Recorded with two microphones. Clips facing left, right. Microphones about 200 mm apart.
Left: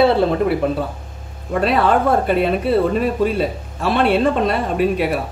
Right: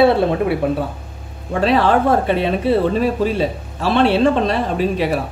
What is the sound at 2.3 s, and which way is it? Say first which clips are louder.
Speech: even; centre (ahead or behind).